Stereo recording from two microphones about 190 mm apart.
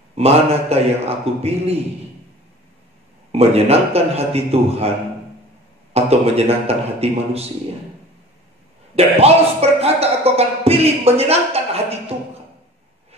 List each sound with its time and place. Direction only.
0.1 s speech: 30° right (ahead or behind)
3.3 s speech: 30° right (ahead or behind)
5.9 s speech: 30° right (ahead or behind)
8.9 s speech: 30° right (ahead or behind)
12.1 s a sound: 30° right (ahead or behind)